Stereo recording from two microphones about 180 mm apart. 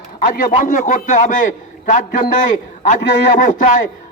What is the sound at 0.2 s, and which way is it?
A man's voice, 50° left (ahead or behind).